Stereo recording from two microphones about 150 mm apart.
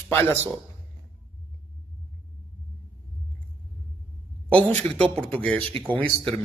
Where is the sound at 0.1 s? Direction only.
15° left (ahead or behind).